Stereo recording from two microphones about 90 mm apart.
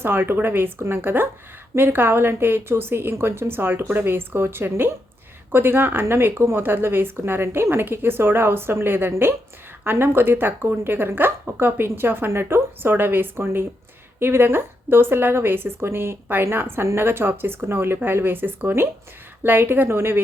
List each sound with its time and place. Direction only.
0.0 s a woman's voice: 25° right (ahead or behind)